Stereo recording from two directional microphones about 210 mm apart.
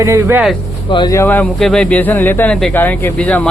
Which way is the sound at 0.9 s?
20° left (ahead or behind).